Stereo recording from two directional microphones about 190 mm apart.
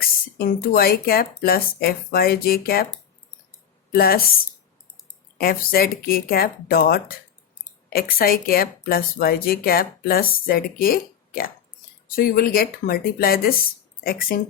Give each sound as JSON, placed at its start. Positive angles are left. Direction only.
{"t": 0.0, "sound": "speech", "side_deg": 50}
{"t": 3.9, "sound": "speech", "side_deg": 50}
{"t": 5.4, "sound": "speech", "side_deg": 50}